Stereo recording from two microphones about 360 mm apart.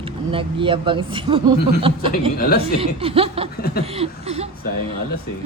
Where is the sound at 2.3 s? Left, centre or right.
Left.